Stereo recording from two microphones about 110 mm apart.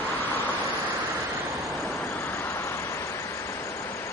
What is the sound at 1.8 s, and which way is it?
Vehicle, 15° left (ahead or behind).